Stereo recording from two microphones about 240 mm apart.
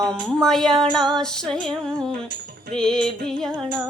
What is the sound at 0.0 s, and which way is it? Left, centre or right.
Music, centre.